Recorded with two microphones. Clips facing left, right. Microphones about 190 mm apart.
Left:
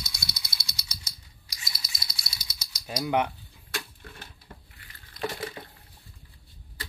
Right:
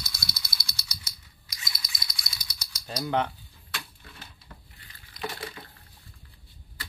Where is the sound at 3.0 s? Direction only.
15° left (ahead or behind).